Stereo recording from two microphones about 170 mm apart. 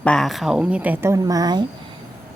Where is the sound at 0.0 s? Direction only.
5° left (ahead or behind).